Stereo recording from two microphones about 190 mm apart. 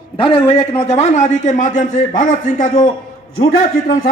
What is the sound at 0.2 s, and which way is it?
A man's voice, 30° left (ahead or behind).